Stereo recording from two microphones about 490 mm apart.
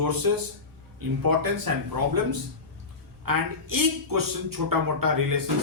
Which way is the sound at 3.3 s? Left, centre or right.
Right.